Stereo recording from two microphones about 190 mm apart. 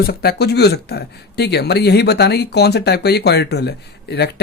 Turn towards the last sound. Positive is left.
turn(degrees=60)  # may be behind; listen again after turning